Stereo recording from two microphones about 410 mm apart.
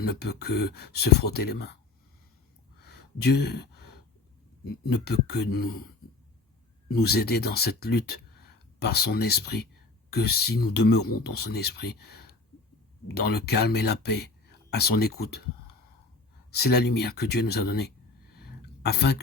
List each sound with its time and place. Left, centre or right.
0.0 s speech: left
2.8 s gasp: left
4.6 s speech: left
6.8 s speech: left
16.5 s speech: left
18.3 s a sound: left